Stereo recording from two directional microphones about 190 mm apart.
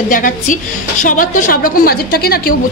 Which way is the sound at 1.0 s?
45° left (ahead or behind).